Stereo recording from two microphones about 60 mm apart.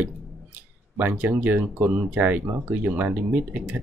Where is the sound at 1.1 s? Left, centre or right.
Right.